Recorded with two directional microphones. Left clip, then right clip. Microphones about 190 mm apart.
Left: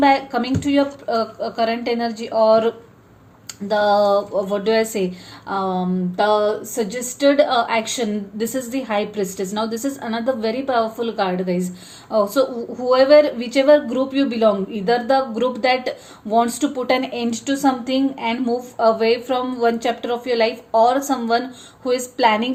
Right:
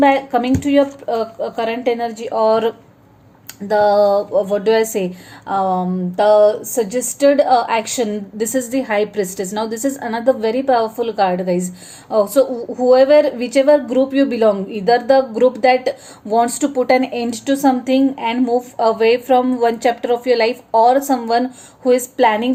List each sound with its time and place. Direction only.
0.0 s a woman's voice: 30° right (ahead or behind)